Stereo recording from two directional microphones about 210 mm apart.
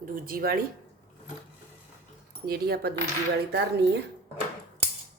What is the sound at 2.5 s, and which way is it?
Speech, 50° right (ahead or behind).